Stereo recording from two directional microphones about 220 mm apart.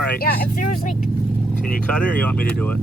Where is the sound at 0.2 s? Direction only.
40° left (ahead or behind).